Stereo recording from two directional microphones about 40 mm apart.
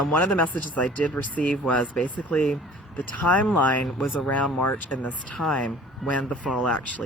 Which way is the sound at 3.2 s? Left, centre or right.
Left.